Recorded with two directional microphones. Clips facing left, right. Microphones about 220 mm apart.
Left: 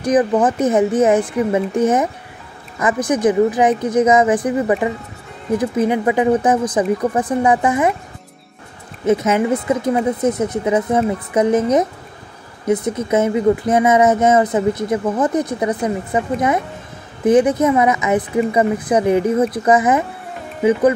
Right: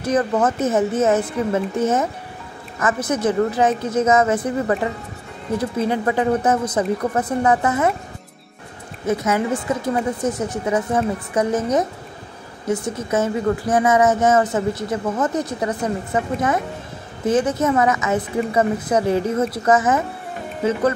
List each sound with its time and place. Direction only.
0.0 s speech: 15° left (ahead or behind)
5.6 s speech: 15° left (ahead or behind)
9.0 s speech: 20° left (ahead or behind)